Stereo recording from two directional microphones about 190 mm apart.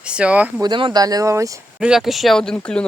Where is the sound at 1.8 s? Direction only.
Centre (ahead or behind).